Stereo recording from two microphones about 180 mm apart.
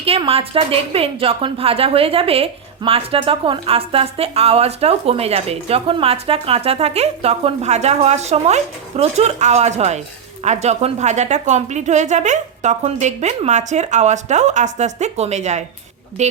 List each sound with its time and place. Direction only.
0.0 s a woman's voice: 30° right (ahead or behind)